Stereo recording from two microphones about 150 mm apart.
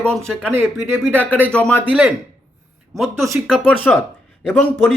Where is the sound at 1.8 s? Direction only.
10° right (ahead or behind).